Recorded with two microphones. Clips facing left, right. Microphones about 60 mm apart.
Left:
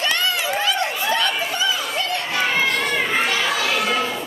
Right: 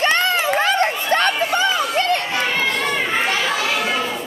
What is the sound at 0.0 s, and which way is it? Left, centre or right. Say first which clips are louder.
Run: right 4 dB; right.